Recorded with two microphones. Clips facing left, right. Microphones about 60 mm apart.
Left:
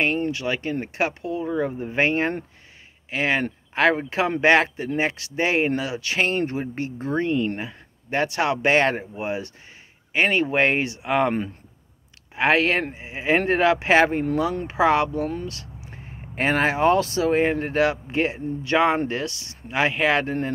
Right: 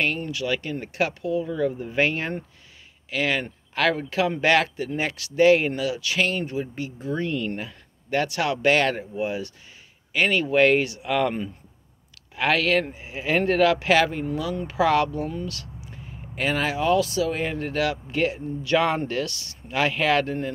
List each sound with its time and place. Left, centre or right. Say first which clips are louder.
0.0 s speech: left 3 dB; left
7.2 s speech: left 4 dB; left